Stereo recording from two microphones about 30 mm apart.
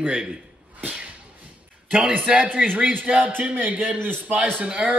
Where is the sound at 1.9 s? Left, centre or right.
Right.